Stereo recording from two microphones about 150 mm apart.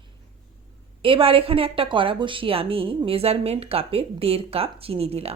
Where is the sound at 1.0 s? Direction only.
35° right (ahead or behind).